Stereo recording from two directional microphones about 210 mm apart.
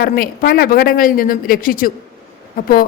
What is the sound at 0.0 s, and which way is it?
A woman's voice, 45° left (ahead or behind).